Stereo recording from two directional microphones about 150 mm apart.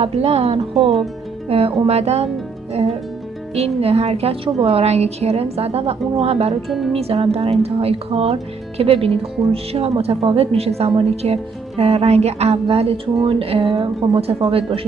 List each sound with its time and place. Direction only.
0.0 s a woman's voice: 45° right (ahead or behind)
0.7 s speech: centre (ahead or behind)
1.9 s a woman's voice: 45° right (ahead or behind)
3.5 s a woman's voice: 45° right (ahead or behind)